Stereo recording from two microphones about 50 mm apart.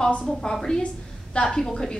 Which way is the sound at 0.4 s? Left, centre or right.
Centre.